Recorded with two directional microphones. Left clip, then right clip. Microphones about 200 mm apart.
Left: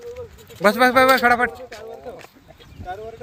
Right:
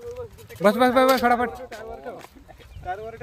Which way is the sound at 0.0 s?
Centre (ahead or behind).